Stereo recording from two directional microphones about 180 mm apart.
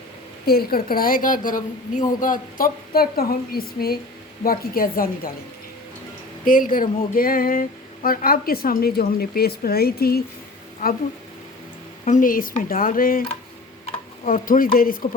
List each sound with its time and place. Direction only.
0.4 s a woman's voice: 55° left (ahead or behind)
6.4 s a woman's voice: 50° left (ahead or behind)
12.0 s a woman's voice: 45° left (ahead or behind)
14.3 s a woman's voice: 50° left (ahead or behind)